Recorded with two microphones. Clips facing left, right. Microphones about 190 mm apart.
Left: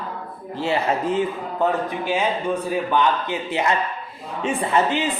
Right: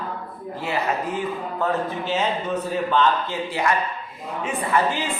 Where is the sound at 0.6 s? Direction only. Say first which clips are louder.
Left 4 dB; 25° left (ahead or behind).